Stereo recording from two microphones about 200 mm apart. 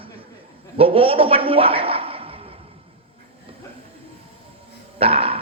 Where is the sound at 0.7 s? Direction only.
30° right (ahead or behind).